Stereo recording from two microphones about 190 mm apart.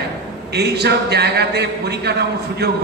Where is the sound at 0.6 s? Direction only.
60° right (ahead or behind).